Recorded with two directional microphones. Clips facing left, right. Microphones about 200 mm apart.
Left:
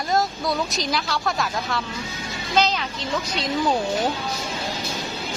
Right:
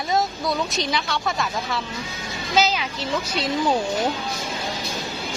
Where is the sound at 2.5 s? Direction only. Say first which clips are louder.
Even; 5° right (ahead or behind).